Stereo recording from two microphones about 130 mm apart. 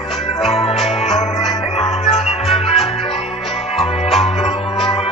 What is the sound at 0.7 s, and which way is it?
Music, centre (ahead or behind).